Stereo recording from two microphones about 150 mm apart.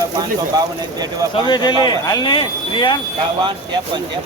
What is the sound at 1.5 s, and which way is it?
Speech, 30° left (ahead or behind).